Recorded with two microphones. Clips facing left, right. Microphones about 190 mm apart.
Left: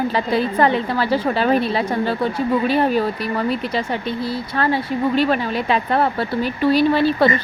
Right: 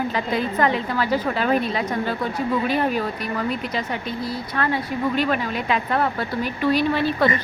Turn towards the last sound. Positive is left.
turn(degrees=30)  # may be behind; listen again after turning